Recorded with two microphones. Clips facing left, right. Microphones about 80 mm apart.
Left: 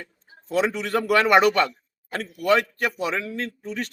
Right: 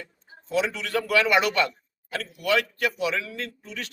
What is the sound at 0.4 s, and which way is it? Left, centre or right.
A man's voice, left.